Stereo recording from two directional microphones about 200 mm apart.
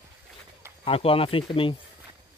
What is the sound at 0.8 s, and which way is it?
Speech, 30° left (ahead or behind).